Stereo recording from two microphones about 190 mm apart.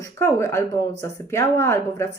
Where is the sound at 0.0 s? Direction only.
15° left (ahead or behind).